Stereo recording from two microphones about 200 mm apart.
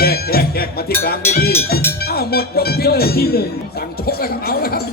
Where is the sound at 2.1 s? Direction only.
50° left (ahead or behind).